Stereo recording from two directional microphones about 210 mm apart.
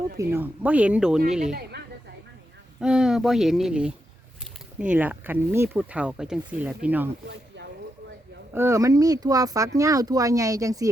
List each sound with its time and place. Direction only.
0.2 s speech: 10° right (ahead or behind)
2.8 s speech: 5° right (ahead or behind)
7.3 s a sound: 55° right (ahead or behind)
8.5 s speech: 15° right (ahead or behind)